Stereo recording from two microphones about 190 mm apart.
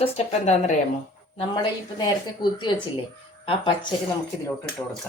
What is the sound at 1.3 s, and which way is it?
Speech, 25° left (ahead or behind).